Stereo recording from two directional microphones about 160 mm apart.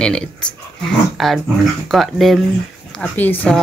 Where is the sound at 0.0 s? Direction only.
5° left (ahead or behind).